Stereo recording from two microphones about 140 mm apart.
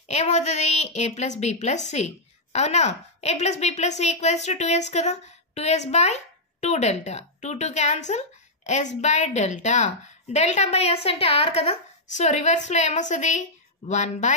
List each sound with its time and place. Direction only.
0.1 s a woman's voice: 55° left (ahead or behind)
12.1 s a woman's voice: 55° left (ahead or behind)